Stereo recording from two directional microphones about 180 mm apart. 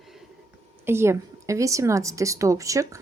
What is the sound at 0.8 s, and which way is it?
Speech, 15° right (ahead or behind).